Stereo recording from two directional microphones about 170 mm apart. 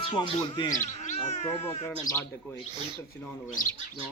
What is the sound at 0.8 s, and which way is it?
Cat, 45° left (ahead or behind).